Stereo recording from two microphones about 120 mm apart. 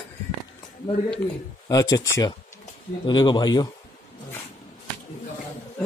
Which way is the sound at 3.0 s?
40° left (ahead or behind).